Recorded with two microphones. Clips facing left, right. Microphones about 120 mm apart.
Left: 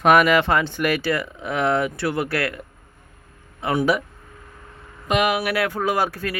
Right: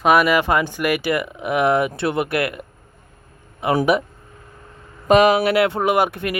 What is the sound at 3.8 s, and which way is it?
Speech, 20° right (ahead or behind).